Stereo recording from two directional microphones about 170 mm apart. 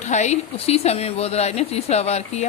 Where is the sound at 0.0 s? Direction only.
45° left (ahead or behind).